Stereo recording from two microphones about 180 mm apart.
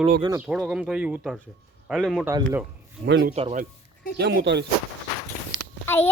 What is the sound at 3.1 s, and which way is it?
Speech, 70° right (ahead or behind).